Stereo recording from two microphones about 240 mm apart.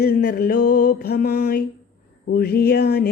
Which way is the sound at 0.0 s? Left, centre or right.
Left.